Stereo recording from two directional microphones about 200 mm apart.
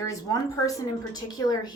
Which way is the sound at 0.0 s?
15° left (ahead or behind).